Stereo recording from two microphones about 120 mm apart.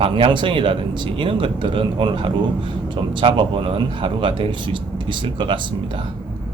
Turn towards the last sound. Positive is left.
turn(degrees=-40)  # may be behind; listen again after turning